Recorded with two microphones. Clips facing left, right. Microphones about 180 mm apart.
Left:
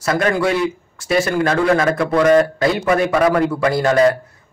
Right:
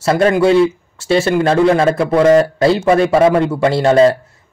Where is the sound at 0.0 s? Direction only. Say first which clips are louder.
Right 5 dB; 30° right (ahead or behind).